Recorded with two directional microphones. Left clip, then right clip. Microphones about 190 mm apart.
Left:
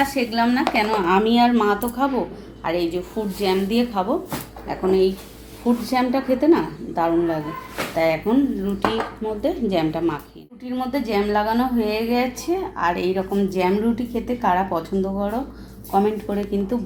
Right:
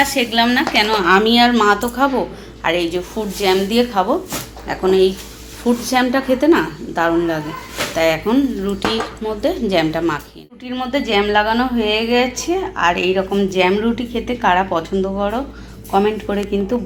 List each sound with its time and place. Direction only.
0.0 s a woman's voice: centre (ahead or behind)